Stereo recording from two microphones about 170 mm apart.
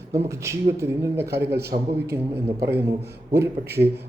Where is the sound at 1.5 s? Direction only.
70° right (ahead or behind).